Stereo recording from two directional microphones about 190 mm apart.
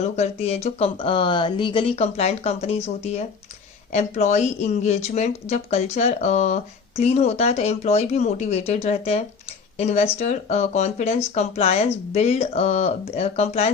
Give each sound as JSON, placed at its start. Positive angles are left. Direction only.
{"t": 0.0, "sound": "speech", "side_deg": 35}